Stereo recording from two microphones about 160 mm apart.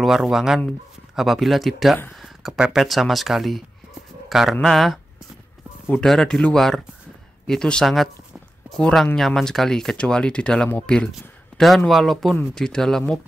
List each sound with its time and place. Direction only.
0.0 s speech: centre (ahead or behind)